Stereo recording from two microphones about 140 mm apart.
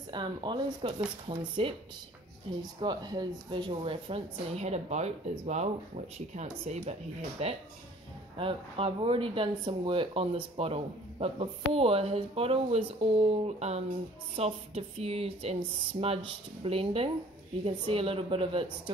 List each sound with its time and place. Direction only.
0.1 s a woman's voice: 35° right (ahead or behind)
2.8 s speech: 30° right (ahead or behind); by 5.7 s 50° right (ahead or behind)
6.9 s a woman's voice: 50° right (ahead or behind)